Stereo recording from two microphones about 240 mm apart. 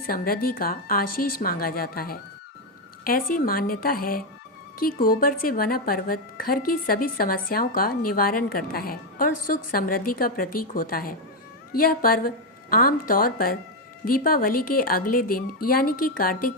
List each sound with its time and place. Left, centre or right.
0.0 s speech: left